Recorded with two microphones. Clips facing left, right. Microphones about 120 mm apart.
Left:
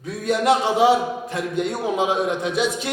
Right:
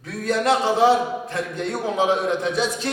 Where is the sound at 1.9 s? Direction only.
15° left (ahead or behind).